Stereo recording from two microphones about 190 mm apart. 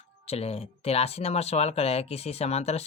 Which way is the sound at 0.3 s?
30° left (ahead or behind).